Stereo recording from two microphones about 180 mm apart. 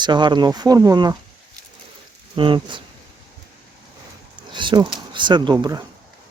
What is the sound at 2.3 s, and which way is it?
Speech, 25° right (ahead or behind).